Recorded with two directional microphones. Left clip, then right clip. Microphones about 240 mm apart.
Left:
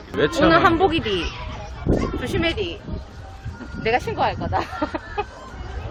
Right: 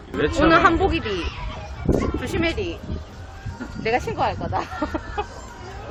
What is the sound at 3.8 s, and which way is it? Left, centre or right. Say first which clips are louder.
Speech: left 1 dB; centre.